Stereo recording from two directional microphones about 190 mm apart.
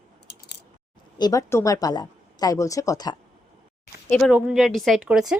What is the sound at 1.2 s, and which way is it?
Speech, 15° left (ahead or behind).